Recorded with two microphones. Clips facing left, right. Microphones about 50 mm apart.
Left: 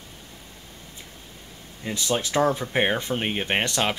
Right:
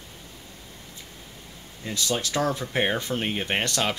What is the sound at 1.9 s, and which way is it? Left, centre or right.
Speech, centre.